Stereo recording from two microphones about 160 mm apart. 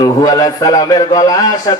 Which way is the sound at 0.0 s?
25° left (ahead or behind).